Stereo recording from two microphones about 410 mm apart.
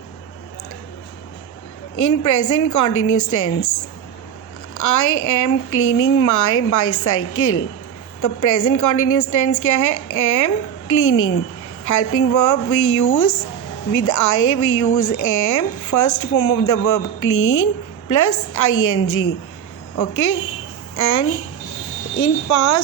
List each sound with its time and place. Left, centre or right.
2.0 s a woman's voice: left
4.7 s a woman's voice: left
8.2 s a woman's voice: left
18.1 s a woman's voice: left
20.0 s a woman's voice: left